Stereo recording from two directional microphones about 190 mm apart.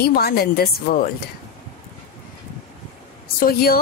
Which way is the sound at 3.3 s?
50° left (ahead or behind).